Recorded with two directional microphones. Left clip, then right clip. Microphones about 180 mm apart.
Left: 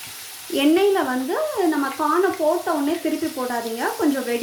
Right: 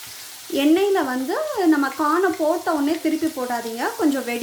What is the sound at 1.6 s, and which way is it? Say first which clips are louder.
Speech: right 5 dB; 35° right (ahead or behind).